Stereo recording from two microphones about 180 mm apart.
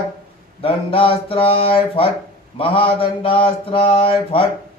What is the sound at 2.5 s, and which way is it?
Mantra, 30° left (ahead or behind).